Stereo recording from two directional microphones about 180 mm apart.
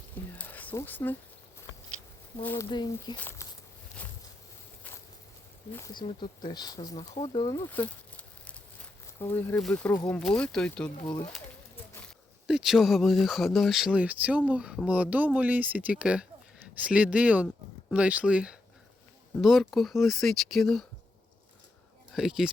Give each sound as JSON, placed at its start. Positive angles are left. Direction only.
{"t": 0.3, "sound": "a sound", "side_deg": 10}
{"t": 2.4, "sound": "speech", "side_deg": 10}
{"t": 2.6, "sound": "speech", "side_deg": 25}
{"t": 3.2, "sound": "speech", "side_deg": 10}
{"t": 4.0, "sound": "a sound", "side_deg": 10}
{"t": 5.7, "sound": "speech", "side_deg": 20}
{"t": 7.7, "sound": "a sound", "side_deg": 10}
{"t": 9.2, "sound": "speech", "side_deg": 10}
{"t": 11.0, "sound": "speech", "side_deg": 20}
{"t": 12.0, "sound": "speech", "side_deg": 0}
{"t": 22.1, "sound": "speech", "side_deg": 0}